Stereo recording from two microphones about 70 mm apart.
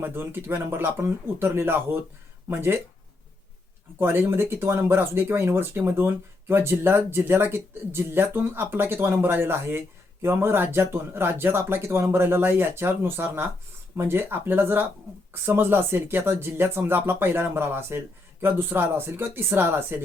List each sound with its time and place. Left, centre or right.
0.0 s speech: right
3.9 s speech: right